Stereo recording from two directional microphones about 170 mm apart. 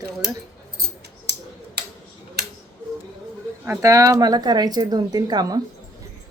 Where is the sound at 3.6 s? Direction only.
15° right (ahead or behind).